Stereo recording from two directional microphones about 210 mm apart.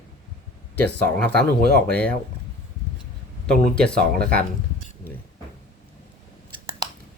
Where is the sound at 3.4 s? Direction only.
5° left (ahead or behind).